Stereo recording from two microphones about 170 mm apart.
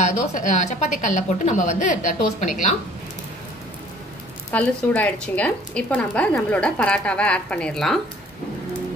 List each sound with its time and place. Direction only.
0.0 s a woman's voice: 45° left (ahead or behind)
4.5 s speech: 10° left (ahead or behind)